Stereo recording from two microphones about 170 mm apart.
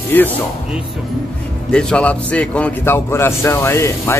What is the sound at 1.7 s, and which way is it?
Speech, 5° left (ahead or behind).